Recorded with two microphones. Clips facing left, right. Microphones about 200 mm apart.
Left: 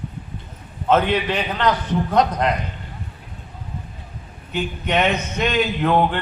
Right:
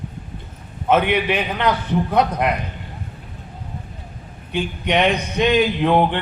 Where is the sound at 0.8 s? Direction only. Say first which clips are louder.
Right 1 dB; 10° right (ahead or behind).